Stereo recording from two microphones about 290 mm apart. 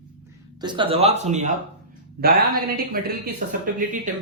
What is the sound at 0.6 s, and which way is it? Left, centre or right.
Speech, centre.